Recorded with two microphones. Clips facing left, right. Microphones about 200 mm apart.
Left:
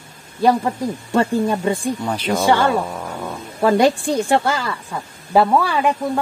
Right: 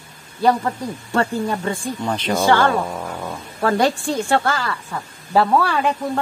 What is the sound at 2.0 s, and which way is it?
Speech, 10° left (ahead or behind).